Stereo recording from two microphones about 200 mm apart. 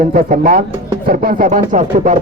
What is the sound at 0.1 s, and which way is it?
Speech, 40° right (ahead or behind).